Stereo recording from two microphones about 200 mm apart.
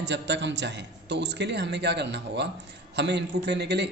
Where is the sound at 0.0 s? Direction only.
60° right (ahead or behind).